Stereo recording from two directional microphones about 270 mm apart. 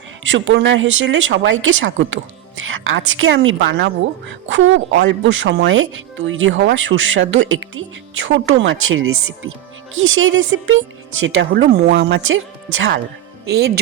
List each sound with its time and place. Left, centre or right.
0.3 s speech: right
13.4 s speech: right